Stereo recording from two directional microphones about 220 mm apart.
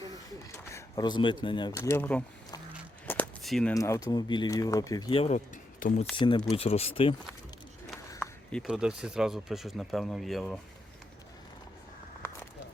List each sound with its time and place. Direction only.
0.7 s speech: 15° left (ahead or behind)
3.1 s a sound: 5° left (ahead or behind)
3.8 s speech: 15° left (ahead or behind); by 6.1 s 35° left (ahead or behind)
6.1 s speech: 20° left (ahead or behind)
8.2 s speech: centre (ahead or behind)